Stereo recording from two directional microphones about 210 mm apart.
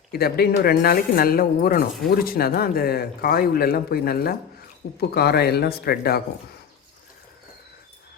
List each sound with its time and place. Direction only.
0.1 s speech: 45° left (ahead or behind)